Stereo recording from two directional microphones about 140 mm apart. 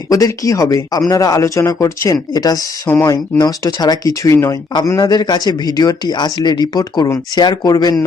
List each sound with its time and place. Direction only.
0.1 s speech: 25° left (ahead or behind)